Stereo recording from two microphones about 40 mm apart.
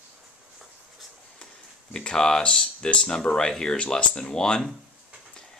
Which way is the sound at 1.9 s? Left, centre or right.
Centre.